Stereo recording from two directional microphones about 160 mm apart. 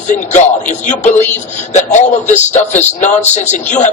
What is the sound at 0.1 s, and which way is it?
A man's voice, 50° left (ahead or behind).